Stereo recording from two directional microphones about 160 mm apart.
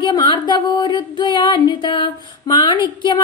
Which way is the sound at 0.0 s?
25° left (ahead or behind).